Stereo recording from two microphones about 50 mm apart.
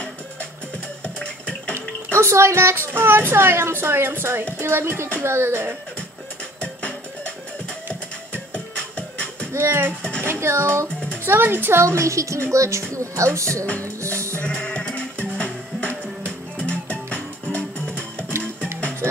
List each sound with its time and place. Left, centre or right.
1.0 s bathtub: left
2.1 s speech: right
2.9 s speech: right
6.6 s music: left
8.5 s music: left
9.6 s speech: right
11.2 s speech: right
11.8 s a woman's voice: right
12.4 s a woman's voice: right
12.9 s speech: right
13.7 s music: left
14.1 s speech: right
14.4 s music: left